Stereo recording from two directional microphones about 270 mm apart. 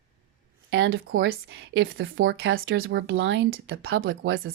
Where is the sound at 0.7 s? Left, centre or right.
Right.